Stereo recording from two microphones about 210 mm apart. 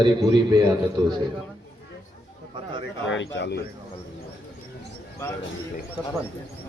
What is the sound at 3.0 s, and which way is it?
Speech, 60° left (ahead or behind).